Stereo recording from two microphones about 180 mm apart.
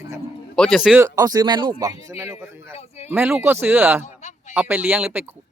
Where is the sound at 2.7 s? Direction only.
35° left (ahead or behind).